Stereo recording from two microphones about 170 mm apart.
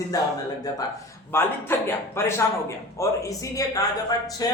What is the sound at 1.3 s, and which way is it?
A man's voice, 15° left (ahead or behind).